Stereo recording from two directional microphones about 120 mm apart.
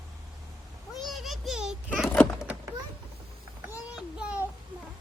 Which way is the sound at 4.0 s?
5° right (ahead or behind).